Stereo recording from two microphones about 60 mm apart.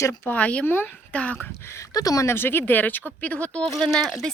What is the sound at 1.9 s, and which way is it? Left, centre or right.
Speech, left.